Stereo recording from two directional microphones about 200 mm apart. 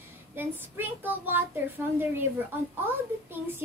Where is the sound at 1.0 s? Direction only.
10° right (ahead or behind).